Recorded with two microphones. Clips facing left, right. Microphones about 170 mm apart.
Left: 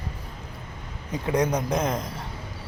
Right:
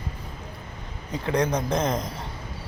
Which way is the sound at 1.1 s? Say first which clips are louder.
Even; 15° left (ahead or behind).